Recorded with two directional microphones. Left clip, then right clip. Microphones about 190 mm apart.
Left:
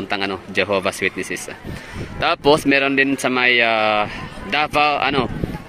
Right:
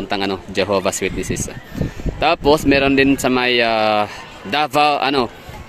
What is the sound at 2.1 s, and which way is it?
Speech, 10° right (ahead or behind).